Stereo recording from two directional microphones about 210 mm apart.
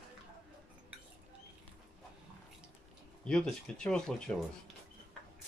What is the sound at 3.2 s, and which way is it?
Speech, 5° left (ahead or behind).